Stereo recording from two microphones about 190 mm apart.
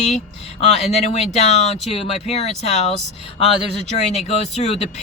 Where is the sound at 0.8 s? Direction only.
Centre (ahead or behind).